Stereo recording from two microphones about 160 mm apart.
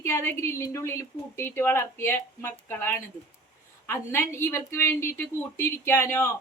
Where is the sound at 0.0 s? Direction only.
15° left (ahead or behind).